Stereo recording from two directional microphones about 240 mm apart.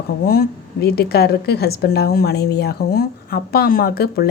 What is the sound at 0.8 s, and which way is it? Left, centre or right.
A woman's voice, left.